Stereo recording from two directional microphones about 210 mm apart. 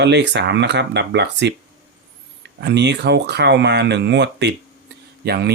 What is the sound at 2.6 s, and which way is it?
Speech, 55° right (ahead or behind).